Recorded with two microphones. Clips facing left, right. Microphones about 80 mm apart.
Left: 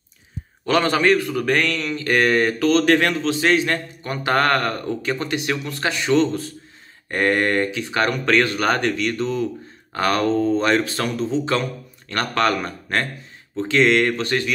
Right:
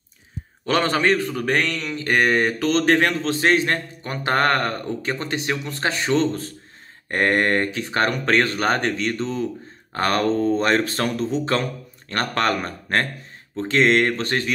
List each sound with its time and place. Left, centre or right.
0.7 s a man's voice: right
9.9 s speech: right